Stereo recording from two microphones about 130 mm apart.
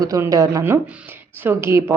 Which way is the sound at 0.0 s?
25° right (ahead or behind).